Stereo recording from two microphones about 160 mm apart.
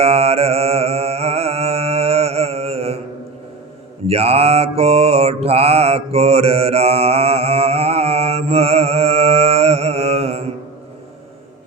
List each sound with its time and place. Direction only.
0.0 s mantra: 40° right (ahead or behind)
4.0 s mantra: 40° right (ahead or behind)